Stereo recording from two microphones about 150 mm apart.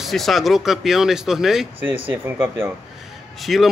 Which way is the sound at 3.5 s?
Centre (ahead or behind).